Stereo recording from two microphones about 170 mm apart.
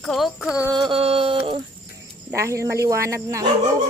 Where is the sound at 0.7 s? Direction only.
30° right (ahead or behind).